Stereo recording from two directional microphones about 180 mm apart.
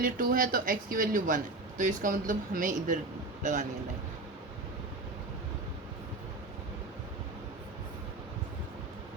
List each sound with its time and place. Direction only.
0.0 s speech: 50° right (ahead or behind)